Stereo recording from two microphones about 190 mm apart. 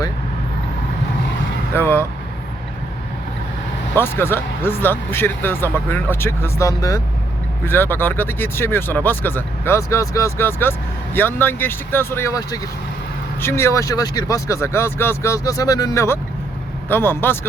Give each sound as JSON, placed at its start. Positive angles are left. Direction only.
{"t": 1.7, "sound": "speech", "side_deg": 10}
{"t": 3.9, "sound": "speech", "side_deg": 10}